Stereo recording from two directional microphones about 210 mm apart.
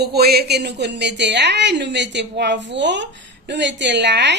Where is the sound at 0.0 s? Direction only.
50° right (ahead or behind).